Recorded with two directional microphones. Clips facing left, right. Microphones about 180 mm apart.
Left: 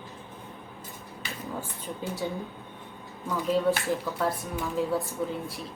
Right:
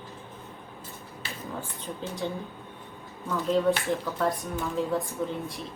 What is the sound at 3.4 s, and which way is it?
Speech, 5° left (ahead or behind).